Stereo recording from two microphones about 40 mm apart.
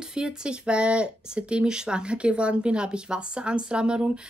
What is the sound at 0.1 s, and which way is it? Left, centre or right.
Speech, right.